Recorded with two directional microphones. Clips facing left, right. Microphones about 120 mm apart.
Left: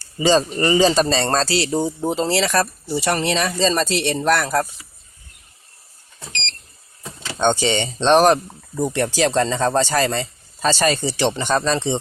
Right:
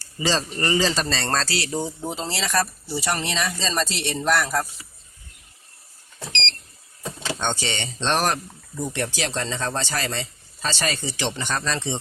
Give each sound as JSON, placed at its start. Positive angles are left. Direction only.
{"t": 0.2, "sound": "a man's voice", "side_deg": 20}
{"t": 2.0, "sound": "speech", "side_deg": 60}
{"t": 7.3, "sound": "a man's voice", "side_deg": 20}
{"t": 8.9, "sound": "speech", "side_deg": 40}